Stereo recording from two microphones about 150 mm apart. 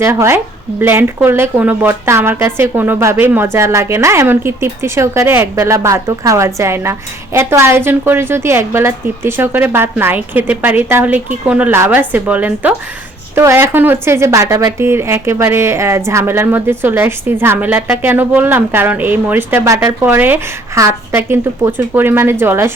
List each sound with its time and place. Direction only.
0.0 s a woman's voice: 15° right (ahead or behind)